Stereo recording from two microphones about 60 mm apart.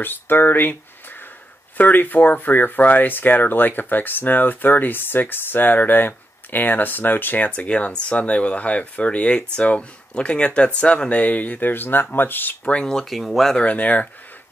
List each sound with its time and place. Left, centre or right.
0.0 s speech: left
12.7 s speech: centre
13.0 s speech: centre
13.6 s speech: left